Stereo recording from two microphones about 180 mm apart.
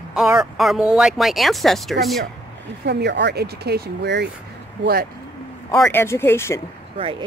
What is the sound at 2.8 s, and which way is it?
Speech, 70° right (ahead or behind).